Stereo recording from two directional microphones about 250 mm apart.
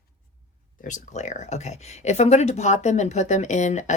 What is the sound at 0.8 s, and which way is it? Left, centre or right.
Speech, left.